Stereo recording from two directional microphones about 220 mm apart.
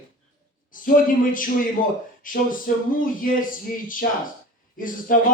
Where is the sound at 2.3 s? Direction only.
40° left (ahead or behind).